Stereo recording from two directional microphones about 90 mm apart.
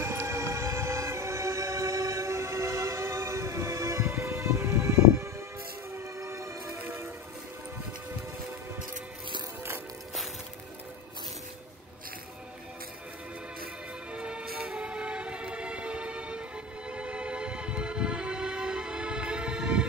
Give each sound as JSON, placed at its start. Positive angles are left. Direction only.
{"t": 0.0, "sound": "music", "side_deg": -30}
{"t": 5.9, "sound": "train", "side_deg": -35}
{"t": 14.1, "sound": "music", "side_deg": -10}